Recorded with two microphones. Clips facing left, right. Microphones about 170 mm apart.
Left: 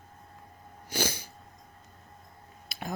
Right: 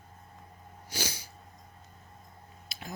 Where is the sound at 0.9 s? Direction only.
55° left (ahead or behind).